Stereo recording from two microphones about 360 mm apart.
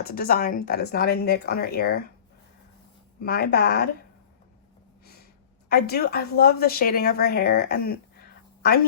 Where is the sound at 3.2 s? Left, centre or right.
Left.